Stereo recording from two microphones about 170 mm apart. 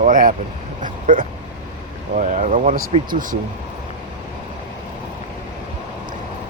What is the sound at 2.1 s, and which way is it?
Speech, 45° right (ahead or behind).